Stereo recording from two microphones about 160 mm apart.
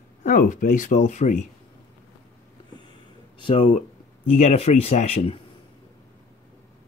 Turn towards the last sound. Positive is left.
turn(degrees=40)  # may be behind; listen again after turning